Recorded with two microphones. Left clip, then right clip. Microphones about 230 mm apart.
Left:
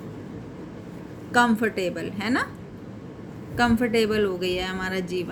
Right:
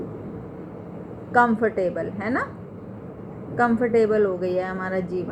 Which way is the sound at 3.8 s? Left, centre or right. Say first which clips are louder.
Right 3 dB; left.